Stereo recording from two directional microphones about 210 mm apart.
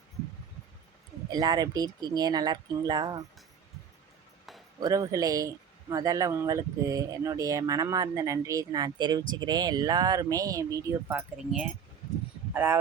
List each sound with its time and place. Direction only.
1.3 s speech: 20° right (ahead or behind)
4.8 s speech: 15° right (ahead or behind)